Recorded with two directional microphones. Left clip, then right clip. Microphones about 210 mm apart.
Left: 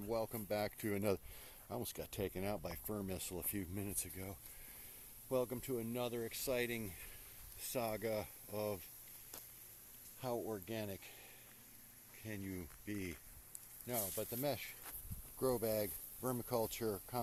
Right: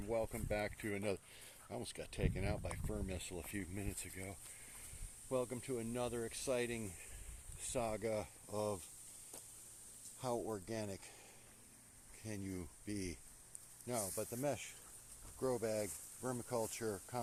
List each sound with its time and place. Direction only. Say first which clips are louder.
0.1 s speech: even; 10° left (ahead or behind)
10.2 s speech: right 1 dB; 5° right (ahead or behind)
12.2 s speech: even; 5° right (ahead or behind)
15.4 s speech: left 2 dB; 25° left (ahead or behind)